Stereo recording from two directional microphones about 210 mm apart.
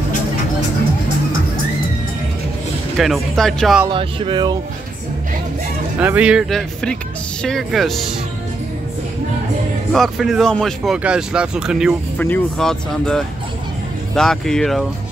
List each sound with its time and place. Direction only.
3.0 s speech: centre (ahead or behind)
3.9 s speech: 20° right (ahead or behind)
5.9 s speech: 5° right (ahead or behind)
9.9 s speech: centre (ahead or behind)